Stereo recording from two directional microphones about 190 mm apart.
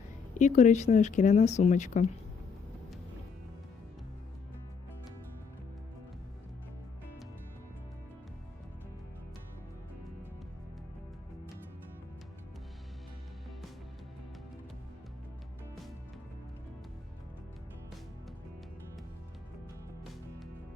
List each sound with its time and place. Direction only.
0.3 s speech: 40° left (ahead or behind)